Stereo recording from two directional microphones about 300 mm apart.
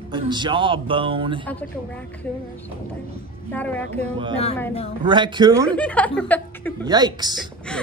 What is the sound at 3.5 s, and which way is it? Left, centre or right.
Speech, centre.